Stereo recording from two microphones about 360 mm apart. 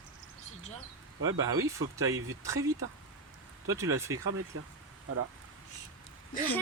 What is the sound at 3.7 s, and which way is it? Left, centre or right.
Speech, centre.